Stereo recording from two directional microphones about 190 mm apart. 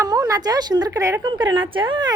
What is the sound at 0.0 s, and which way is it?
A woman's voice, 20° right (ahead or behind).